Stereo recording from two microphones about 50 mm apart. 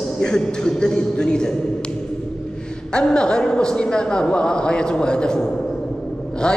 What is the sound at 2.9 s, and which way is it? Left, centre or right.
Speech, centre.